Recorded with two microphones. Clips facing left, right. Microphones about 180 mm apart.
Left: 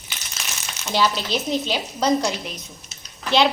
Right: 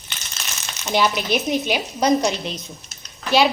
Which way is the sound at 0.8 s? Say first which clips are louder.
Right 2 dB; 15° right (ahead or behind).